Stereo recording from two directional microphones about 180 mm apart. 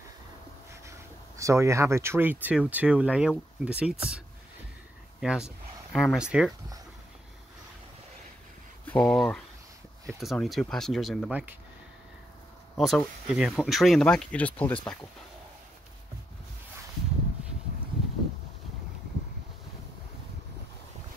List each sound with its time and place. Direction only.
0.8 s speech: 15° right (ahead or behind)
5.2 s speech: 5° right (ahead or behind)
8.8 s speech: 10° left (ahead or behind)
12.7 s speech: centre (ahead or behind)